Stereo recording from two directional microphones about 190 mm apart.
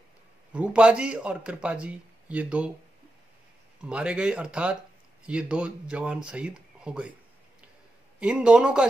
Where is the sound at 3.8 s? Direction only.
5° right (ahead or behind).